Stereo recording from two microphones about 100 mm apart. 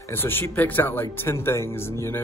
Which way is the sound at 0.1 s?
20° left (ahead or behind).